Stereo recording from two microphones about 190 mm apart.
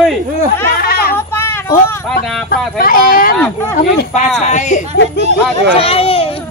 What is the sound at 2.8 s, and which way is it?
Speech, 50° left (ahead or behind).